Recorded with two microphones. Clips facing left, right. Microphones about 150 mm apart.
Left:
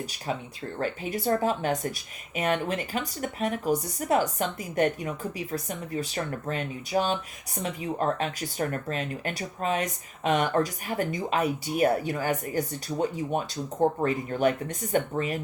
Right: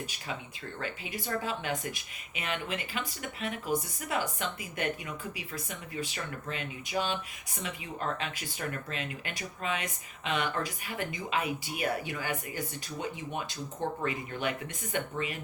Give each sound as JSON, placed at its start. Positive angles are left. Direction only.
{"t": 0.8, "sound": "speech", "side_deg": 40}